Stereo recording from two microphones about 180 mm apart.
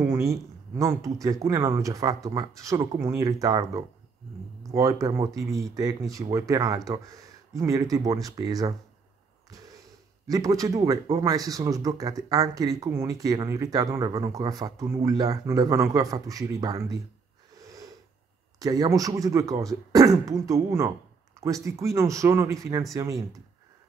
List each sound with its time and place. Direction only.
0.0 s speech: 15° right (ahead or behind)
10.2 s speech: 20° right (ahead or behind)
17.6 s snort: 20° right (ahead or behind)
18.6 s speech: 20° right (ahead or behind)